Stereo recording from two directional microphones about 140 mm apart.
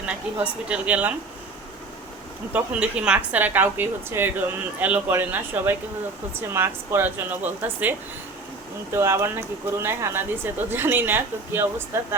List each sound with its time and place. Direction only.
0.3 s a woman's voice: 5° right (ahead or behind)
2.5 s a woman's voice: 10° right (ahead or behind)